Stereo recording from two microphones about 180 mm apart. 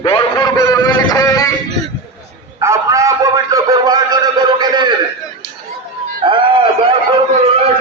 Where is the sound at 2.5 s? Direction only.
15° right (ahead or behind).